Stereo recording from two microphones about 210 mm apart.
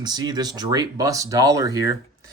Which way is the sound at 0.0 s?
20° right (ahead or behind).